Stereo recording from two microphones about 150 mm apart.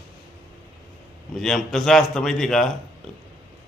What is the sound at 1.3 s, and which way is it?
Speech, centre (ahead or behind).